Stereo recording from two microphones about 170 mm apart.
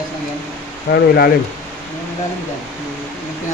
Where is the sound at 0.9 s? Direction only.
70° left (ahead or behind).